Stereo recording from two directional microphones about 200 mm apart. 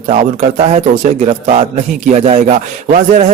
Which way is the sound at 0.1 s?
35° right (ahead or behind).